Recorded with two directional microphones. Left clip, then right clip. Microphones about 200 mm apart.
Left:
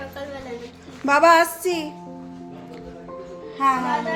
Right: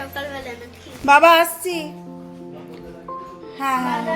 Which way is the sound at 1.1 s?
5° left (ahead or behind).